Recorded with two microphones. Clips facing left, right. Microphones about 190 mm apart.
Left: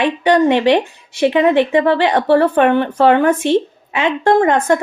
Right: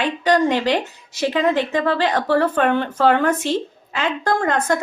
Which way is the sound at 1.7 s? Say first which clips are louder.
Left 6 dB; 70° left (ahead or behind).